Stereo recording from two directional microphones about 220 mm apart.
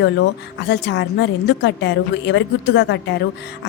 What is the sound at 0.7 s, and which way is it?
A woman's voice, 55° left (ahead or behind).